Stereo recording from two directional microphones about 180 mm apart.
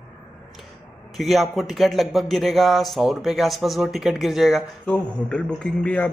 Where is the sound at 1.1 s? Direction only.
Centre (ahead or behind).